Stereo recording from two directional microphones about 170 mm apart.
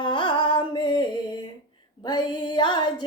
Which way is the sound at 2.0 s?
25° left (ahead or behind).